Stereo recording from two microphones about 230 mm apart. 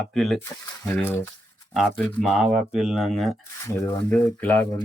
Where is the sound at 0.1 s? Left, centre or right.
Centre.